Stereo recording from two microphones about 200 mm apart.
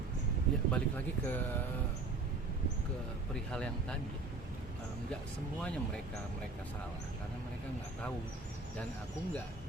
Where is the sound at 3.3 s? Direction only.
5° left (ahead or behind).